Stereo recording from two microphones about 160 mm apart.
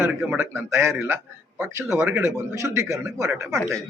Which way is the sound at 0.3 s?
15° right (ahead or behind).